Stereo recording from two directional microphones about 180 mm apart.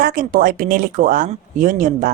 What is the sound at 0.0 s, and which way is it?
Speech, 50° right (ahead or behind).